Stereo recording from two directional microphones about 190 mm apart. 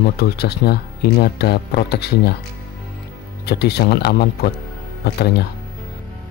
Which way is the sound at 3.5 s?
60° left (ahead or behind).